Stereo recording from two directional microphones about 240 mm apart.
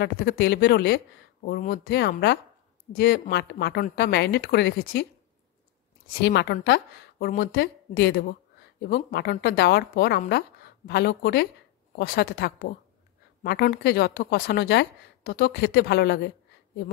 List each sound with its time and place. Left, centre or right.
0.0 s speech: left
6.0 s a woman's voice: left